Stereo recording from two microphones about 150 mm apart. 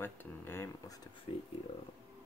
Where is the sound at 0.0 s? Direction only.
15° left (ahead or behind).